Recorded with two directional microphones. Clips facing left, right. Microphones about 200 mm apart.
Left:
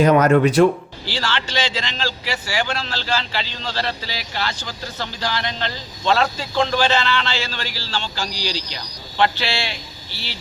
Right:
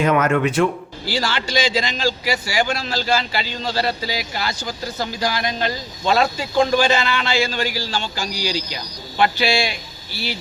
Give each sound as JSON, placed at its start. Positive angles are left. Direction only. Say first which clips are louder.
{"t": 0.0, "sound": "speech", "louder": "left 4 dB", "side_deg": 35}
{"t": 1.0, "sound": "speech", "louder": "right 2 dB", "side_deg": -10}